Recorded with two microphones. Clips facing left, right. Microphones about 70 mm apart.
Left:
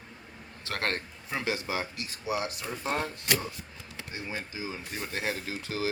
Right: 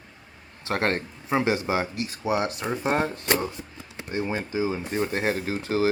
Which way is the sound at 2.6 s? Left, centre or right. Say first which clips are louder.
Right 8 dB; right.